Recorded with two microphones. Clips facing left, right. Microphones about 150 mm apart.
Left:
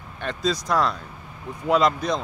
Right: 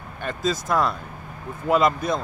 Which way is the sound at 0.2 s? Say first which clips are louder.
Even; 5° right (ahead or behind).